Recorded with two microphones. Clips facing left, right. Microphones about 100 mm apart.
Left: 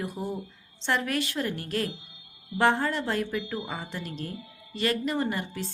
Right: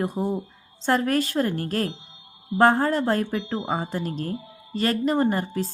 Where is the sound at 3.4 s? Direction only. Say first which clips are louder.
Right 7 dB; 30° right (ahead or behind).